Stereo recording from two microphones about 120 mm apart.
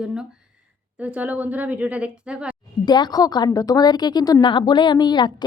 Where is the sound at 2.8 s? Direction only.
35° left (ahead or behind).